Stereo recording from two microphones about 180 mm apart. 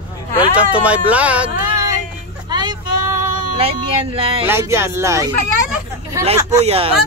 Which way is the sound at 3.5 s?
30° right (ahead or behind).